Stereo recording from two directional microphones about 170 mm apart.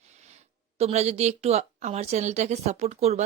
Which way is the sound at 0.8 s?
40° right (ahead or behind).